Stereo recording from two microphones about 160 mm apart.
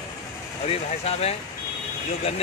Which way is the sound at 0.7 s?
40° left (ahead or behind).